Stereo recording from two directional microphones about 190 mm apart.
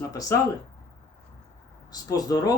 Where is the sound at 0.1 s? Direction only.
15° left (ahead or behind).